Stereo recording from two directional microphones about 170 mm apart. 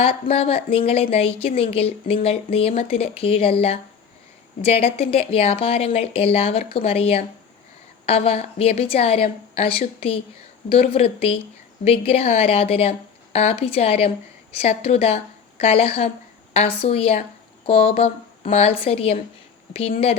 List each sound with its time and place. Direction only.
0.0 s a woman's voice: 35° left (ahead or behind)